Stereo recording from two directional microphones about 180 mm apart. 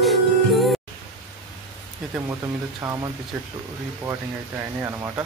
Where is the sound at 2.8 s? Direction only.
15° right (ahead or behind).